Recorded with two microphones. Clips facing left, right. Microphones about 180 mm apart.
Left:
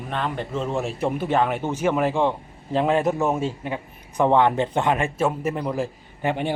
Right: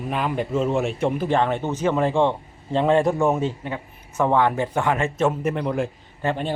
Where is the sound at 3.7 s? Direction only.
15° left (ahead or behind).